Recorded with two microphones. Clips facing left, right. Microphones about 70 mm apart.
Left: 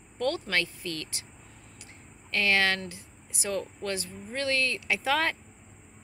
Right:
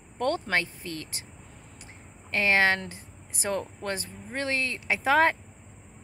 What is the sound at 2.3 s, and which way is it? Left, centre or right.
Speech, right.